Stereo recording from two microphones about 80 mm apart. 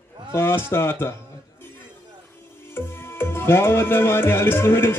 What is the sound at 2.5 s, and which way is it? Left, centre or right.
Music, left.